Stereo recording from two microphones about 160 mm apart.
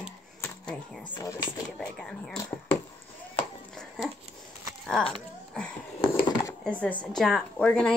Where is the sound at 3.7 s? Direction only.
5° left (ahead or behind).